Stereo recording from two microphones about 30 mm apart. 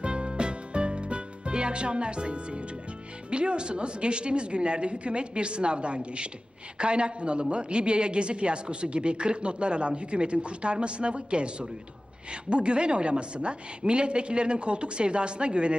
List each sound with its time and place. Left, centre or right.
0.0 s music: right
3.2 s a woman's voice: right